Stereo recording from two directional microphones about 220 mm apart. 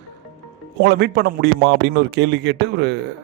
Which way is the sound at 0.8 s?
45° right (ahead or behind).